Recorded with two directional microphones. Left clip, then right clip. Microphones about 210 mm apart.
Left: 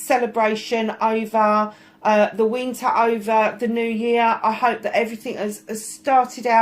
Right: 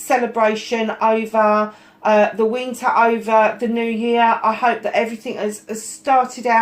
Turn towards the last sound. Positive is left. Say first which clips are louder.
# right 1 dB
turn(degrees=20)  # may be behind; listen again after turning